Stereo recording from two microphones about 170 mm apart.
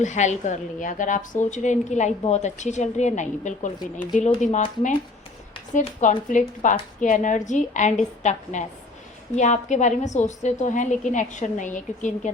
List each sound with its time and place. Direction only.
0.0 s speech: 45° left (ahead or behind)